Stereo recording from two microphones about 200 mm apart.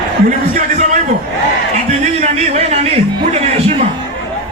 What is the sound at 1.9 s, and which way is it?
Speech, 35° right (ahead or behind).